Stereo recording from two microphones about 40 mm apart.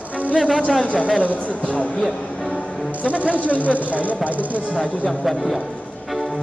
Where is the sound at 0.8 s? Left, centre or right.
Left.